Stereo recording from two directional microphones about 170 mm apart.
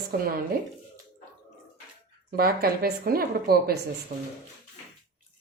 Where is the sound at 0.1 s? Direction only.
65° right (ahead or behind).